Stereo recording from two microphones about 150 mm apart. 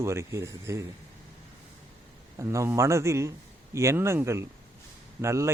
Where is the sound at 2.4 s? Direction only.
20° right (ahead or behind).